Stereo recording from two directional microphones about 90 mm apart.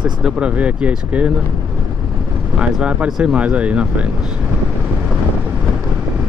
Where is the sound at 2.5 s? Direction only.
10° right (ahead or behind).